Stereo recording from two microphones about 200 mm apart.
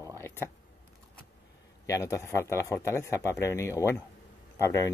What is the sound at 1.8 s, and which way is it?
Speech, 15° left (ahead or behind).